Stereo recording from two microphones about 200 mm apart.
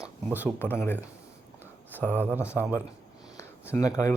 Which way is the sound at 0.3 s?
10° right (ahead or behind).